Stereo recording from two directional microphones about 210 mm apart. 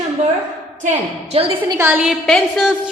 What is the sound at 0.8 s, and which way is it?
Speech, 30° right (ahead or behind).